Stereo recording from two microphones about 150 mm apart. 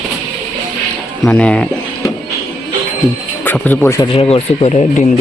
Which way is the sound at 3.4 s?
10° left (ahead or behind).